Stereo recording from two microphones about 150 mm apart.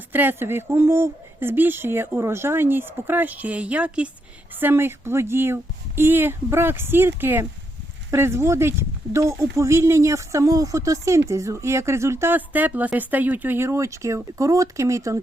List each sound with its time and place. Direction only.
0.1 s speech: 15° right (ahead or behind)